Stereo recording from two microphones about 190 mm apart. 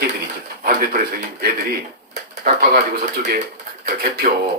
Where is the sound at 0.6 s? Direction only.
45° right (ahead or behind).